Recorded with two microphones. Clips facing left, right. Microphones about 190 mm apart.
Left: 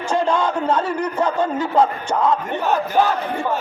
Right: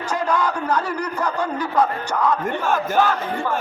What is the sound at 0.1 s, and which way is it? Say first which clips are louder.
A man's voice: left 3 dB; 25° left (ahead or behind).